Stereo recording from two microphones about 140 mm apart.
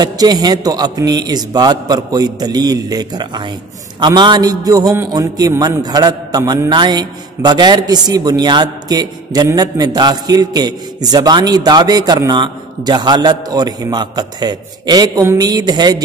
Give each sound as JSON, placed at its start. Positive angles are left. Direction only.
{"t": 0.0, "sound": "a man's voice", "side_deg": -30}